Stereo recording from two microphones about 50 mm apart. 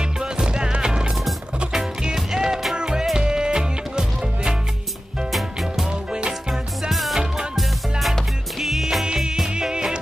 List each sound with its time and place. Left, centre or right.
0.2 s music: centre
5.3 s music: centre
5.9 s music: centre
6.5 s music: centre
9.0 s music: centre